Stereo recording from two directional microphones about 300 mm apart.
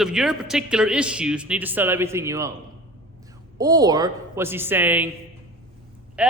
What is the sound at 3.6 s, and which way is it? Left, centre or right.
Speech, centre.